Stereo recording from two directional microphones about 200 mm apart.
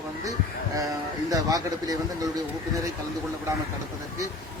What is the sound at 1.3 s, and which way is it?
Speech, 15° right (ahead or behind).